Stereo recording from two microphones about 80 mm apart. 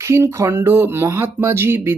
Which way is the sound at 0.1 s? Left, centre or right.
Right.